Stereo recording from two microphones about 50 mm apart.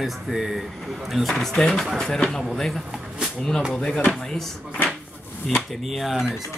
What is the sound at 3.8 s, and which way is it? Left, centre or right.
Speech, centre.